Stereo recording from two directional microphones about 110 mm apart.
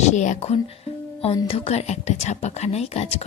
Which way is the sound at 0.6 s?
65° left (ahead or behind).